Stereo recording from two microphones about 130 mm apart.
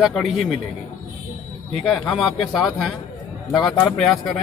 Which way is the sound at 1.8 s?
5° left (ahead or behind).